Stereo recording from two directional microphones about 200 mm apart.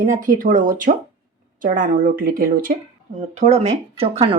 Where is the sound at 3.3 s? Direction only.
35° right (ahead or behind).